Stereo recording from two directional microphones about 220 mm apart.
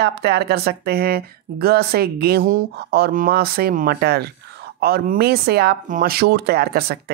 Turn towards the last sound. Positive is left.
turn(degrees=-45)  # may be behind; listen again after turning